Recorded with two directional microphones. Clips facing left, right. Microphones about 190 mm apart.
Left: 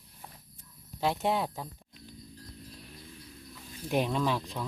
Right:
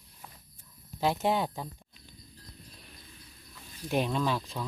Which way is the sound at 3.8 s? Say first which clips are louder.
Even; 15° left (ahead or behind).